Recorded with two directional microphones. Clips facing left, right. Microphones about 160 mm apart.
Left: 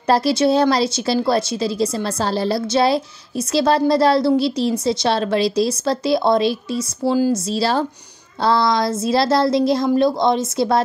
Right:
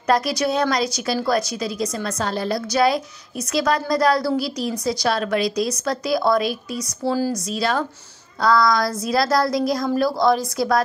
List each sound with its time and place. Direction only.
0.1 s speech: 30° left (ahead or behind)